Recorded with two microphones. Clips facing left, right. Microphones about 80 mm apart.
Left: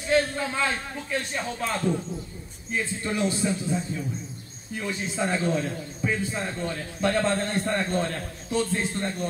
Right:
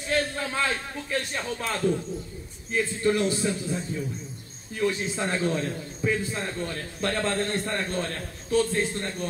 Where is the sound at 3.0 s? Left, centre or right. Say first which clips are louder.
Right 2 dB; centre.